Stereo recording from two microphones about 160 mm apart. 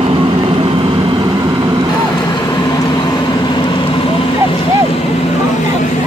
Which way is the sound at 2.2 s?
25° left (ahead or behind).